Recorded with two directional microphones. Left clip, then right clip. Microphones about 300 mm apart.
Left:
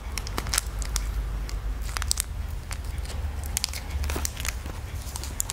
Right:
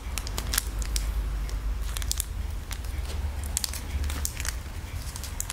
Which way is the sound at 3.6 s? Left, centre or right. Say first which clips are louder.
Left 2 dB; left.